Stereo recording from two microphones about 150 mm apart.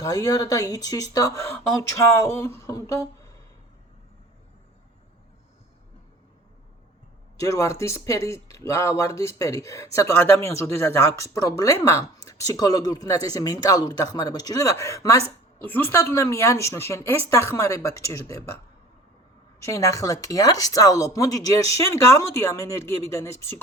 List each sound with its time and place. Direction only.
0.0 s speech: 25° left (ahead or behind)
7.3 s speech: 20° left (ahead or behind)
19.5 s speech: 20° left (ahead or behind)